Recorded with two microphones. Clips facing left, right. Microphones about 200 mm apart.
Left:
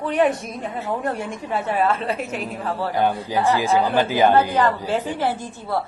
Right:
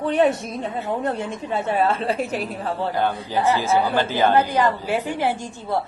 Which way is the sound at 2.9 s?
15° left (ahead or behind).